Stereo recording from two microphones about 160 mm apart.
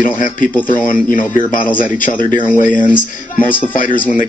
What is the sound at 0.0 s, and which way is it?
Speech, 55° left (ahead or behind).